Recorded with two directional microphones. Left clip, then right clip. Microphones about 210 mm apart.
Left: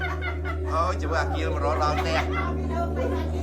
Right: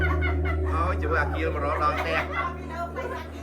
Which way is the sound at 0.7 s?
10° left (ahead or behind).